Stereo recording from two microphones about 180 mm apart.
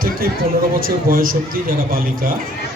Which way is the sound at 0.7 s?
55° right (ahead or behind).